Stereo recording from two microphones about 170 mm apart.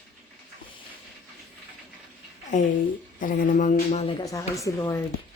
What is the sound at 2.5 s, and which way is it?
Speech, 45° left (ahead or behind).